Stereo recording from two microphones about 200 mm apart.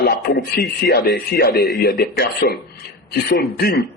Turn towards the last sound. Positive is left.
turn(degrees=50)  # may be behind; listen again after turning